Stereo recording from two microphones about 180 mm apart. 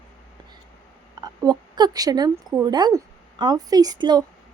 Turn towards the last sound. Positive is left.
turn(degrees=-20)  # may be behind; listen again after turning